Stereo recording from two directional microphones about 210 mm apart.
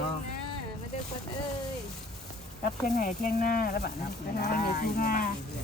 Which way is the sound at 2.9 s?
45° left (ahead or behind).